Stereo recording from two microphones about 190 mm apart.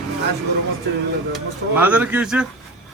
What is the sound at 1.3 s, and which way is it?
Speech, 10° right (ahead or behind).